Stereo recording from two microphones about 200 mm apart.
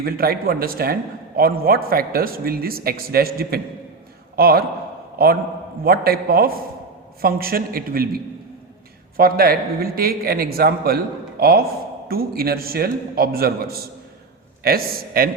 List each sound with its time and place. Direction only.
0.0 s a man's voice: 50° right (ahead or behind)